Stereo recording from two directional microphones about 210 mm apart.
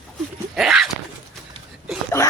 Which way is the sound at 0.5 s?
Centre (ahead or behind).